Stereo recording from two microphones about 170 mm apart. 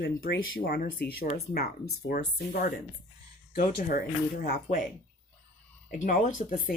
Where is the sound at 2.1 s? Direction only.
55° left (ahead or behind).